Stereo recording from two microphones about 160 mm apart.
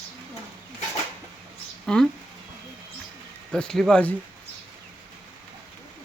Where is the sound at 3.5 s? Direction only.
5° left (ahead or behind).